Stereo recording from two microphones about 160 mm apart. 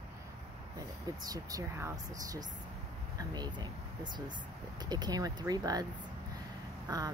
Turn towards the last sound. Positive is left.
turn(degrees=-25)  # may be behind; listen again after turning